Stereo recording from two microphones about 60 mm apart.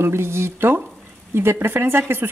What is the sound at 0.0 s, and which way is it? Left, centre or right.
A woman's voice, right.